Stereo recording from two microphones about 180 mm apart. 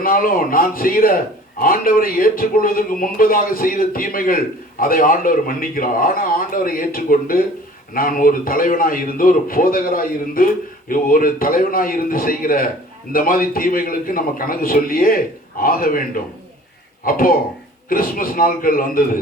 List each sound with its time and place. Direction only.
0.0 s a man's voice: 50° left (ahead or behind)